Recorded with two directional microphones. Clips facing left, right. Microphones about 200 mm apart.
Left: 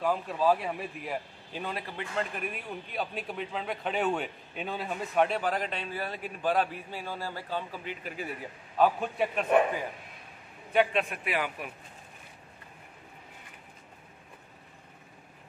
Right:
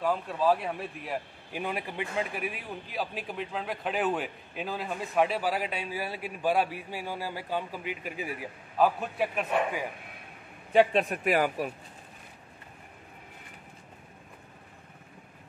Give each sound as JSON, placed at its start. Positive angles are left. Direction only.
{"t": 0.0, "sound": "speech", "side_deg": 0}
{"t": 1.5, "sound": "a man's voice", "side_deg": -15}
{"t": 10.7, "sound": "a man's voice", "side_deg": -35}